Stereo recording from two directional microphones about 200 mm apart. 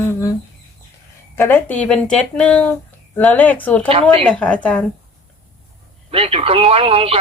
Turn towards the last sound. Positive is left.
turn(degrees=-30)  # may be behind; listen again after turning